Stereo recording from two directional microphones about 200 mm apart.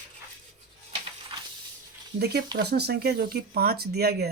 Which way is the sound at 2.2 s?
55° right (ahead or behind).